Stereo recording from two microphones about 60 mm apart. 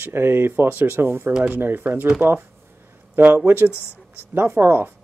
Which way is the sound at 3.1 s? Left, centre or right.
Right.